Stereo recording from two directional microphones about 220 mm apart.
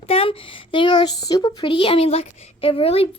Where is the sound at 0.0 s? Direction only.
25° left (ahead or behind).